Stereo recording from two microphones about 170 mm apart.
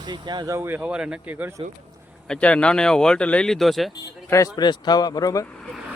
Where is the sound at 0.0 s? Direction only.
25° right (ahead or behind).